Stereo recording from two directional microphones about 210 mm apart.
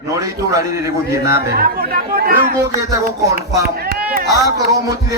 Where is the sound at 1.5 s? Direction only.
45° right (ahead or behind).